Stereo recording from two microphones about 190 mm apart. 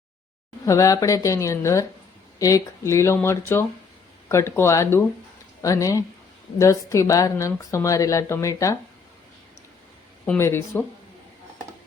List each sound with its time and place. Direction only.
0.6 s a woman's voice: 15° left (ahead or behind)
10.2 s a woman's voice: 10° left (ahead or behind)